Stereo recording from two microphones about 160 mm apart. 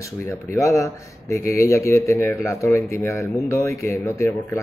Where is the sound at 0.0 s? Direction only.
15° left (ahead or behind).